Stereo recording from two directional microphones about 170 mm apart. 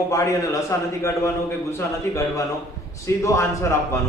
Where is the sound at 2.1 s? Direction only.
20° left (ahead or behind).